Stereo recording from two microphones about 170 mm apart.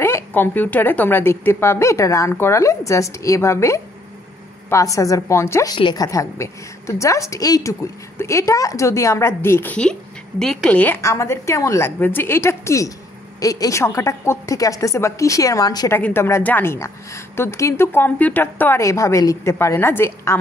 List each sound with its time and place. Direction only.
0.0 s a woman's voice: 15° left (ahead or behind)